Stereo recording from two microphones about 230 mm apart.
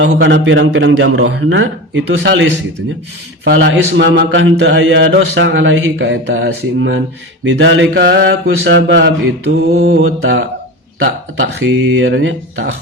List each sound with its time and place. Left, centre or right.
0.0 s speech: right